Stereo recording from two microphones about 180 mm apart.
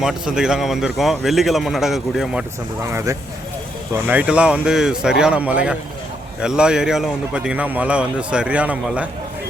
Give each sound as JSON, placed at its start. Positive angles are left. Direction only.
{"t": 0.0, "sound": "a man's voice", "side_deg": -5}
{"t": 2.8, "sound": "a man's voice", "side_deg": -15}